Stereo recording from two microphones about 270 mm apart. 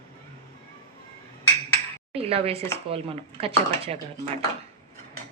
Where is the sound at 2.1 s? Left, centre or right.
Right.